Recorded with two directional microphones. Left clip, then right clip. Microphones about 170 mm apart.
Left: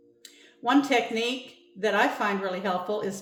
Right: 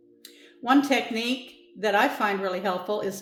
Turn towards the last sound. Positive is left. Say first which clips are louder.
# right 1 dB
turn(degrees=-25)  # may be behind; listen again after turning